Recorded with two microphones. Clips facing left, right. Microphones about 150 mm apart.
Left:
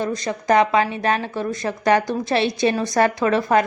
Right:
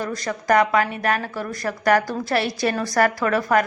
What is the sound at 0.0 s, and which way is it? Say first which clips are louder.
A woman's voice: left 3 dB; 20° left (ahead or behind).